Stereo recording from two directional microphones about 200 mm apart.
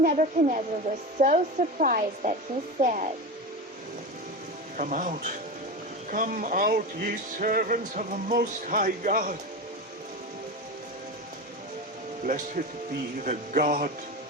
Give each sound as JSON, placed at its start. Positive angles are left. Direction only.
{"t": 0.0, "sound": "a woman's voice", "side_deg": -40}
{"t": 4.8, "sound": "a woman's voice", "side_deg": -40}
{"t": 12.2, "sound": "a woman's voice", "side_deg": -40}